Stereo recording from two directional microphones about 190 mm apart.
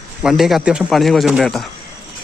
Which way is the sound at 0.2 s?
Centre (ahead or behind).